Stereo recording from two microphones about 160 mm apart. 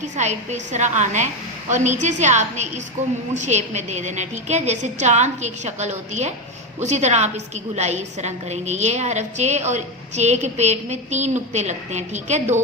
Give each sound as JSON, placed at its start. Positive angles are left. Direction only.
{"t": 0.0, "sound": "a woman's voice", "side_deg": -45}